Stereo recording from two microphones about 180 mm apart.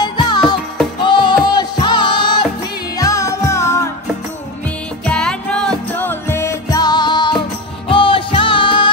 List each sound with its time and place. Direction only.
0.0 s music: 25° left (ahead or behind)
5.0 s music: 5° left (ahead or behind); by 8.9 s 25° left (ahead or behind)